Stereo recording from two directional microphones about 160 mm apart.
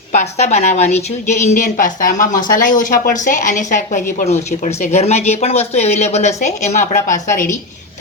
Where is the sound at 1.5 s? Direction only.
55° left (ahead or behind).